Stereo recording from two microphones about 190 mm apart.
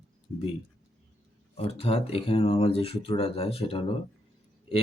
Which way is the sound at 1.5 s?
30° left (ahead or behind).